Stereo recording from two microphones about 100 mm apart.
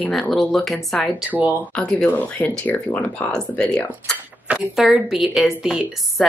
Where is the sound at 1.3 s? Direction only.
15° right (ahead or behind).